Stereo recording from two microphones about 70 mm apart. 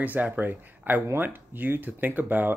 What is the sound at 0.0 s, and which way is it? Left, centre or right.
Speech, right.